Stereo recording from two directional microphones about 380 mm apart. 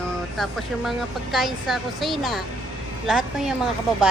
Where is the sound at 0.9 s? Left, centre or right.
Centre.